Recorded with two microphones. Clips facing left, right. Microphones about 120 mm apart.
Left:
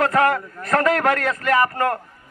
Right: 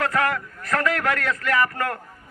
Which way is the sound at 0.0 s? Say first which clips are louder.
Left 5 dB; 30° left (ahead or behind).